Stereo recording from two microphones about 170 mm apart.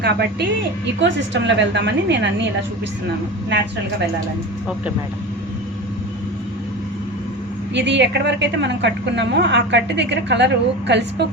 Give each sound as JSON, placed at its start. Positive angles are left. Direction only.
{"t": 0.0, "sound": "a woman's voice", "side_deg": -75}
{"t": 1.0, "sound": "a woman's voice", "side_deg": -90}
{"t": 7.7, "sound": "a woman's voice", "side_deg": -90}